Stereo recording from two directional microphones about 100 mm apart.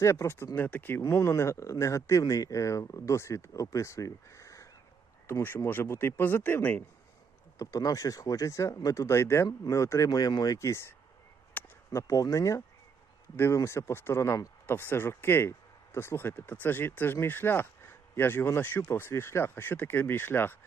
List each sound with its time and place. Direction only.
0.0 s speech: 30° left (ahead or behind)
7.6 s speech: 35° left (ahead or behind)
10.1 s speech: 40° left (ahead or behind)
11.6 s a sound: 20° left (ahead or behind)
11.9 s speech: 35° left (ahead or behind)
13.3 s speech: 20° left (ahead or behind)
14.7 s speech: 20° left (ahead or behind)